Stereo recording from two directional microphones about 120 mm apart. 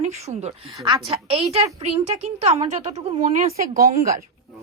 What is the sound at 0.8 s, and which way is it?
Speech, 45° right (ahead or behind).